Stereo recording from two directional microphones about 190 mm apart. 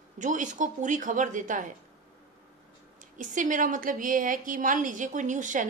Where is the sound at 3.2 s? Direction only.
40° right (ahead or behind).